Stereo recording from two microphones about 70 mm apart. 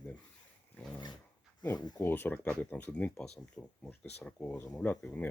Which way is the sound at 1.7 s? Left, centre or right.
Left.